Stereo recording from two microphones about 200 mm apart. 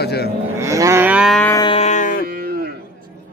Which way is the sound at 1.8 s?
35° left (ahead or behind).